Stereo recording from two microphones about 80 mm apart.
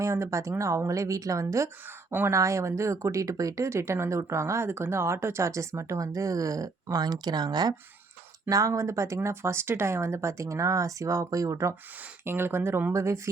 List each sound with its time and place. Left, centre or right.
0.0 s speech: right
8.4 s speech: right
12.2 s speech: right